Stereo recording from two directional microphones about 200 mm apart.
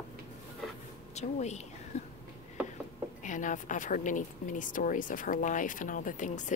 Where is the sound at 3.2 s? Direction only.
40° left (ahead or behind).